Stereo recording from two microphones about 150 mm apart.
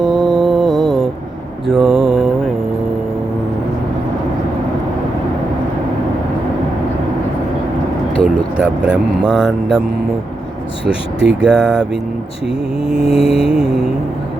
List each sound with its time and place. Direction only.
0.0 s mantra: centre (ahead or behind)
8.5 s speech: 5° right (ahead or behind)
11.3 s speech: 5° right (ahead or behind)
12.9 s mantra: 40° left (ahead or behind)
13.3 s speech: 5° right (ahead or behind)